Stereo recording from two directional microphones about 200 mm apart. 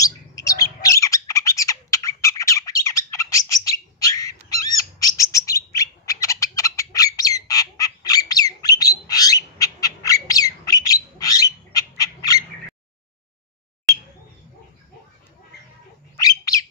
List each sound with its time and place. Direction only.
0.0 s bird: 15° left (ahead or behind)
16.2 s bird: 20° left (ahead or behind)